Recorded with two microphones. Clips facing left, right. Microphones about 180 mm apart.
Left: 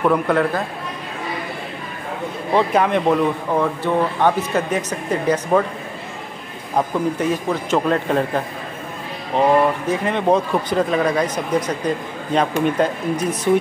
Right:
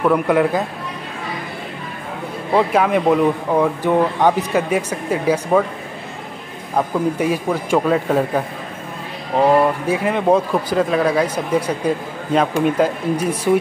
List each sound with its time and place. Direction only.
0.0 s speech: 10° right (ahead or behind)
2.5 s speech: 5° right (ahead or behind)
7.2 s speech: 10° right (ahead or behind)
9.4 s speech: 5° right (ahead or behind)
13.1 s speech: 30° right (ahead or behind)